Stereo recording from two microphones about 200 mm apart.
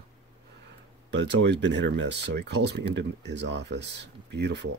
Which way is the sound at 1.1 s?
60° right (ahead or behind).